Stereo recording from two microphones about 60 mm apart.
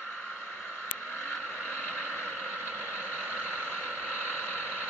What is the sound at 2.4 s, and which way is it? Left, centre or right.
Vehicle, right.